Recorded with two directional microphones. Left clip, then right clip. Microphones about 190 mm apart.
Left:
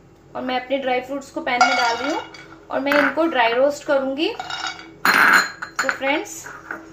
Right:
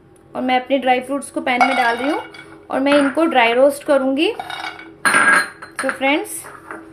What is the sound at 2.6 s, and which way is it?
Speech, 55° right (ahead or behind).